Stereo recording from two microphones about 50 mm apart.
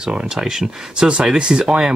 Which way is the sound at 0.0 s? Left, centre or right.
Centre.